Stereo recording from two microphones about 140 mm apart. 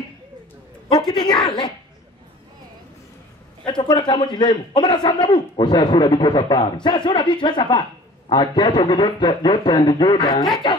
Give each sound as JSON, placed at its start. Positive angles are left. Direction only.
{"t": 0.9, "sound": "a man's voice", "side_deg": 30}
{"t": 3.6, "sound": "a man's voice", "side_deg": 35}